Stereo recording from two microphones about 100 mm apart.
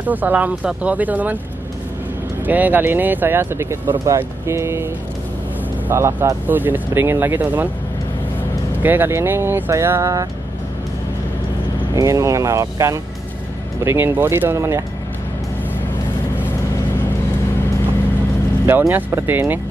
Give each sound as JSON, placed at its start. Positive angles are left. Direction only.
{"t": 0.0, "sound": "speech", "side_deg": -15}
{"t": 2.4, "sound": "speech", "side_deg": -15}
{"t": 5.9, "sound": "speech", "side_deg": -25}
{"t": 8.8, "sound": "speech", "side_deg": -20}
{"t": 11.9, "sound": "speech", "side_deg": -35}
{"t": 18.7, "sound": "speech", "side_deg": -20}